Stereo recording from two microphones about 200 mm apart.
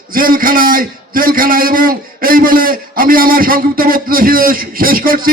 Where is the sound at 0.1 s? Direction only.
45° right (ahead or behind).